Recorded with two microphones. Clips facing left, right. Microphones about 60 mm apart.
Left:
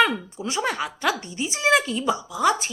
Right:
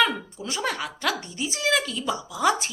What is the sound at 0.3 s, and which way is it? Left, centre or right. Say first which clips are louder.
A woman's voice: left 3 dB; centre.